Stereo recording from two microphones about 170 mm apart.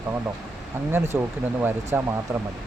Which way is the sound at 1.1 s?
10° right (ahead or behind).